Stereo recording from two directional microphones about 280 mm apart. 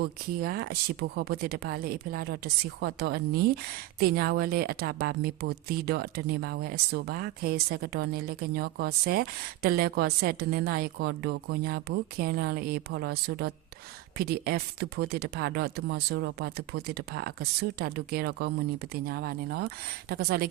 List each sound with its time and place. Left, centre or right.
0.0 s a woman's voice: right